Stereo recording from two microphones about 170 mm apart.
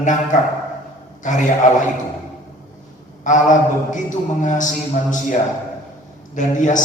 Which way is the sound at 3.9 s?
50° left (ahead or behind).